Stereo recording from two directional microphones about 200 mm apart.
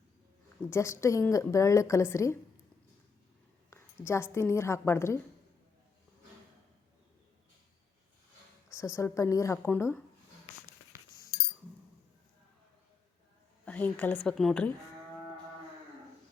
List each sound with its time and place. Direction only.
0.7 s speech: 15° left (ahead or behind)
3.7 s a woman's voice: 10° left (ahead or behind)
8.7 s speech: 15° left (ahead or behind)
10.9 s chink: 15° right (ahead or behind)
13.7 s a woman's voice: 10° left (ahead or behind)